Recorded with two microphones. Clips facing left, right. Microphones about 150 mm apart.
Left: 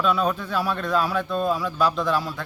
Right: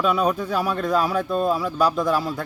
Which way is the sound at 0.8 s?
10° right (ahead or behind).